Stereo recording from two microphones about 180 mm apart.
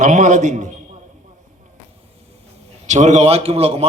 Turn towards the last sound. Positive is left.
turn(degrees=-35)  # may be behind; listen again after turning